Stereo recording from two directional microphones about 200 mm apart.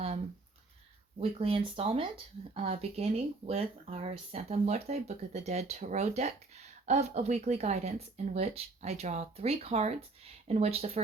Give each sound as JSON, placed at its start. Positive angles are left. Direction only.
{"t": 1.2, "sound": "speech", "side_deg": -30}